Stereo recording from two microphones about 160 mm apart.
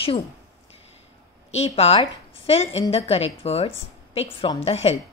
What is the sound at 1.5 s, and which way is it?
A woman's voice, 40° left (ahead or behind).